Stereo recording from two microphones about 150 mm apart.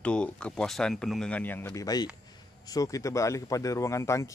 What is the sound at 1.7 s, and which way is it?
Speech, 25° left (ahead or behind).